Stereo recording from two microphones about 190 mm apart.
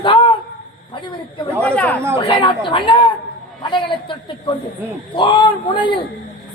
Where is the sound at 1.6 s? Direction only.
5° left (ahead or behind).